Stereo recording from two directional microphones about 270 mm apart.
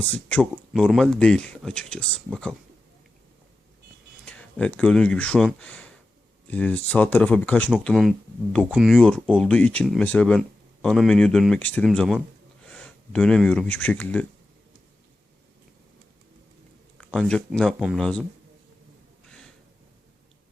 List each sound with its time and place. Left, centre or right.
0.0 s speech: centre
4.3 s speech: centre
17.0 s speech: centre